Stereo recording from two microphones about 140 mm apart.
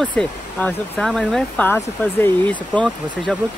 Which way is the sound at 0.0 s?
10° left (ahead or behind).